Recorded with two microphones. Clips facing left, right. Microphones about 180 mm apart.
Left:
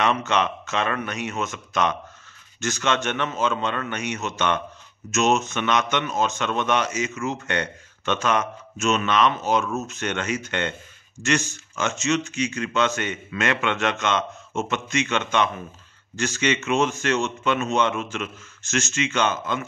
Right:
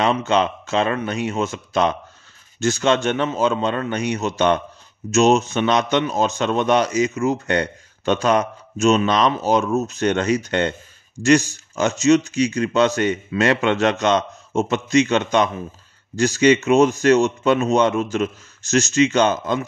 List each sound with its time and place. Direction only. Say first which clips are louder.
0.0 s speech: right 4 dB; 30° right (ahead or behind)